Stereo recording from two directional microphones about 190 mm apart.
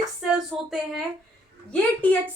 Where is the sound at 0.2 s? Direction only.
Centre (ahead or behind).